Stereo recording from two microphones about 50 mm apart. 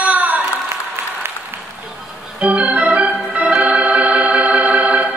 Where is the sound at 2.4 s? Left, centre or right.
Right.